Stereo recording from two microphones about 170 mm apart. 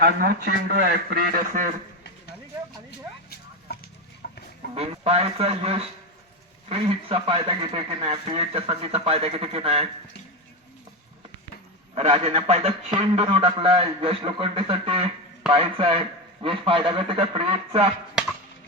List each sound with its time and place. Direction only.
0.0 s a man's voice: 65° right (ahead or behind)
3.7 s chicken: 65° left (ahead or behind)
4.2 s a sound: 60° left (ahead or behind)
4.7 s a man's voice: 35° right (ahead or behind)
11.9 s a man's voice: 35° right (ahead or behind)